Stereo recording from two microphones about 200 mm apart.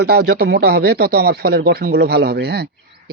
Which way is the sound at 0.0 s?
55° right (ahead or behind).